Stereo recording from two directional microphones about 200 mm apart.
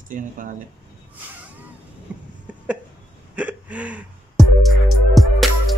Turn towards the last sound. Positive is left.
turn(degrees=0)  # may be behind; listen again after turning